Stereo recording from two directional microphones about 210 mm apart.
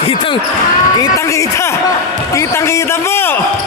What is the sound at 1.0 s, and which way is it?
A man's voice, 15° left (ahead or behind).